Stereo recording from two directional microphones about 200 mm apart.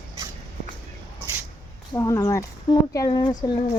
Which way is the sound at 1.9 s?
15° left (ahead or behind).